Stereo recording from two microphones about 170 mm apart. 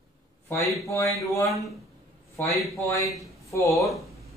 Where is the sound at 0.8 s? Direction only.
20° left (ahead or behind).